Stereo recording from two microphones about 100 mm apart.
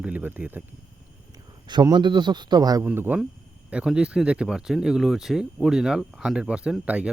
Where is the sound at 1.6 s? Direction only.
45° right (ahead or behind).